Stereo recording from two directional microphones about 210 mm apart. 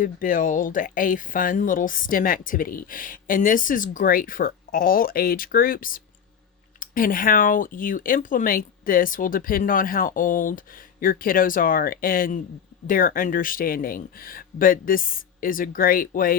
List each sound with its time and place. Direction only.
0.0 s speech: 40° left (ahead or behind)